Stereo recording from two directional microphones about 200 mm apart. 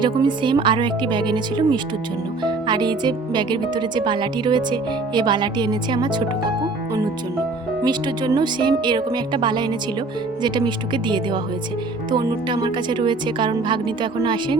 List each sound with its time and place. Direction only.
0.0 s speech: 25° right (ahead or behind)
7.8 s speech: 20° right (ahead or behind)